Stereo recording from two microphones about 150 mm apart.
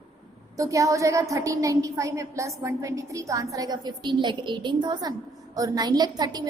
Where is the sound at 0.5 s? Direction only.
20° right (ahead or behind).